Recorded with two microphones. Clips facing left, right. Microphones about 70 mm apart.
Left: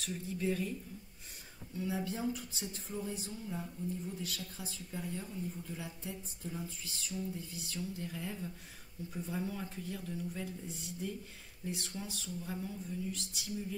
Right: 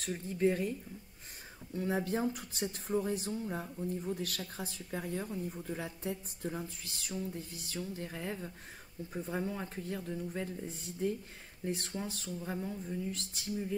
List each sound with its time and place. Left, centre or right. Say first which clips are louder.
0.0 s speech: right 6 dB; right
1.8 s speech: right 4 dB; right
3.3 s speech: right 5 dB; right
7.7 s speech: right 2 dB; right